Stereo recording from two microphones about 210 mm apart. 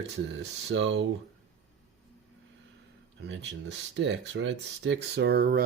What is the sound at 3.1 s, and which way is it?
Speech, 60° right (ahead or behind).